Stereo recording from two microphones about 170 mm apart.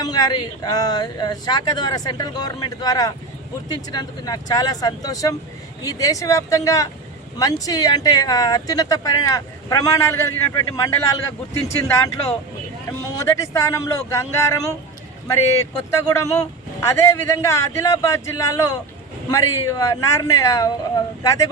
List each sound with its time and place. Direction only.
0.0 s speech: 25° left (ahead or behind)
13.1 s speech: 20° left (ahead or behind)